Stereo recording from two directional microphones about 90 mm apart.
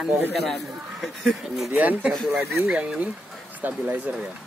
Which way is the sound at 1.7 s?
20° right (ahead or behind).